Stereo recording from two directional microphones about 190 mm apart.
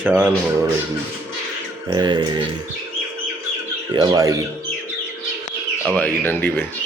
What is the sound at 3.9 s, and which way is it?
Speech, 20° right (ahead or behind).